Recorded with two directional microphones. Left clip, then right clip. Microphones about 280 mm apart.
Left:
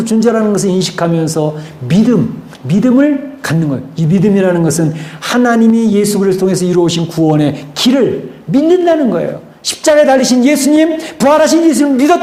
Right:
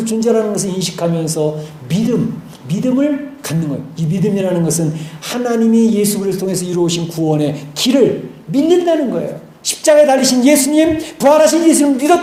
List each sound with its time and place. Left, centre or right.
0.0 s a man's voice: left